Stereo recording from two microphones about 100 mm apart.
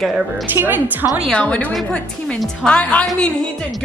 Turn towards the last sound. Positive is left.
turn(degrees=10)  # may be behind; listen again after turning